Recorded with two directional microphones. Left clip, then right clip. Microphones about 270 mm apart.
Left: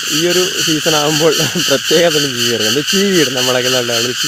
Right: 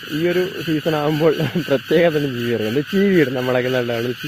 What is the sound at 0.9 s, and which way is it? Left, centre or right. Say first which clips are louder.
Speech: left 4 dB; centre.